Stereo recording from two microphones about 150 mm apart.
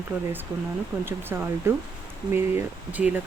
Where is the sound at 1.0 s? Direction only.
15° right (ahead or behind).